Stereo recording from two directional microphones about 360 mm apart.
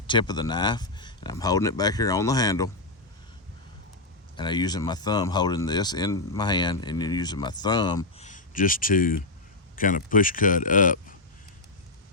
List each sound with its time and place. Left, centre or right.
0.1 s speech: centre
4.4 s speech: centre